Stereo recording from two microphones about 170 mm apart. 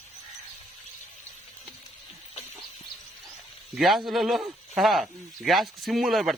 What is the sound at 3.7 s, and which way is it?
A man's voice, centre (ahead or behind).